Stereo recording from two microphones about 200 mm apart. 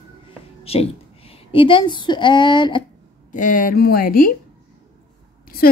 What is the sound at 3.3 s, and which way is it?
A woman's voice, 40° left (ahead or behind).